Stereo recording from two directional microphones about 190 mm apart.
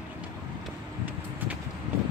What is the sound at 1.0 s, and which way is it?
Vehicle, 10° right (ahead or behind).